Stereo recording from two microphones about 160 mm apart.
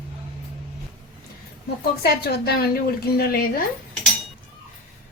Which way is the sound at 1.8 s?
75° left (ahead or behind).